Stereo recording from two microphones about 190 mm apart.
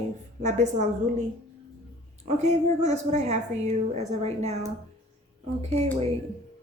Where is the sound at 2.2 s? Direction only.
35° right (ahead or behind).